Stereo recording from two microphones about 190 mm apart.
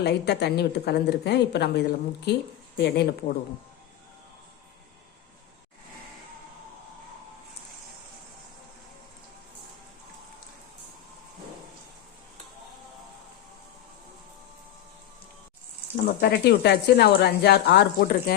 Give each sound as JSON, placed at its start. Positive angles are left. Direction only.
{"t": 0.0, "sound": "speech", "side_deg": 60}
{"t": 16.0, "sound": "speech", "side_deg": 55}